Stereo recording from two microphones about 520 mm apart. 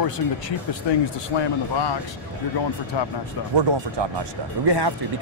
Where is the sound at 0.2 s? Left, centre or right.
Left.